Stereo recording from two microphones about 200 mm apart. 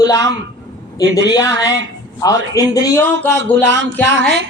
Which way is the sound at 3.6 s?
65° right (ahead or behind).